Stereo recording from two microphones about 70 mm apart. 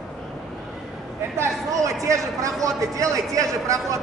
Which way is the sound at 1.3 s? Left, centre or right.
Right.